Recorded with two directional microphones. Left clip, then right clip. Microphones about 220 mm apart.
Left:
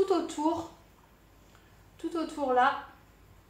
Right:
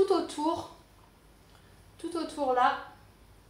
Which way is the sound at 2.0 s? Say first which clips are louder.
Even; 20° left (ahead or behind).